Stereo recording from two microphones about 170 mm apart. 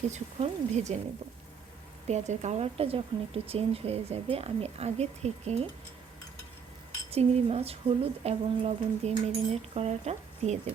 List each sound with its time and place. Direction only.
0.1 s speech: 40° right (ahead or behind)
2.0 s speech: 40° right (ahead or behind)
7.1 s speech: 35° right (ahead or behind)